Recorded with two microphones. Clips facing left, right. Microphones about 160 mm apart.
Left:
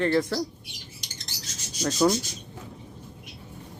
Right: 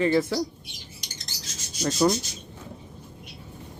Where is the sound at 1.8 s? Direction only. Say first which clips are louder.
Even; centre (ahead or behind).